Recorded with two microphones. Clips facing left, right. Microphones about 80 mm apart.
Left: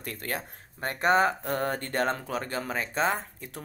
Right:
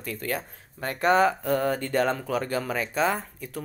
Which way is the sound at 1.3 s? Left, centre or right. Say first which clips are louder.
Right 4 dB; left.